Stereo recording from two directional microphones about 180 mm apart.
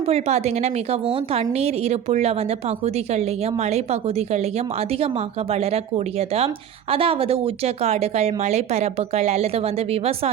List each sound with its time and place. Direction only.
0.0 s a woman's voice: 35° right (ahead or behind)